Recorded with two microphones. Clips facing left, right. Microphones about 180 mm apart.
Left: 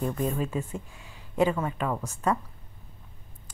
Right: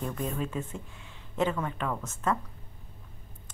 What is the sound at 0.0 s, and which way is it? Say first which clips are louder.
Speech: left 4 dB; 5° left (ahead or behind).